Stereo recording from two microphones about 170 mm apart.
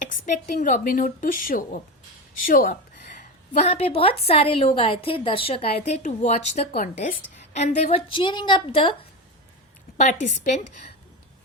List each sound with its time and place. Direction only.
0.6 s speech: 50° left (ahead or behind)
3.2 s a woman's voice: 40° left (ahead or behind)
10.0 s speech: 45° left (ahead or behind)